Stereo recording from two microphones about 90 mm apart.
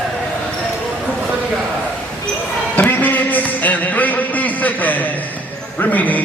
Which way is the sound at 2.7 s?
20° left (ahead or behind).